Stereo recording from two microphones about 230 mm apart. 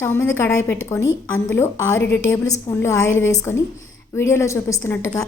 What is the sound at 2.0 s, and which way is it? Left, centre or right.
Speech, left.